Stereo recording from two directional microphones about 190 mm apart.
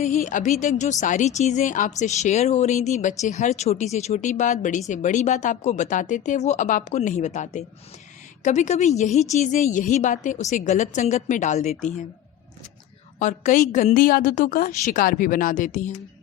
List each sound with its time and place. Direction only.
0.0 s speech: 40° left (ahead or behind)
13.1 s a woman's voice: 40° left (ahead or behind)